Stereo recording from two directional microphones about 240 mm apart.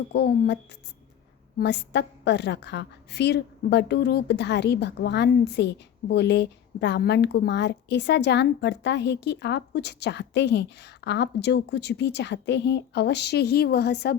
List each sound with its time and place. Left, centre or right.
0.1 s a woman's voice: left